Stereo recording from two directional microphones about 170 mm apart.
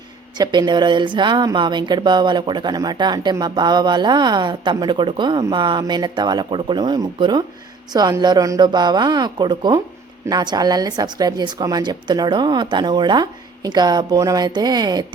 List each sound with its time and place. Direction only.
0.3 s a woman's voice: 25° right (ahead or behind)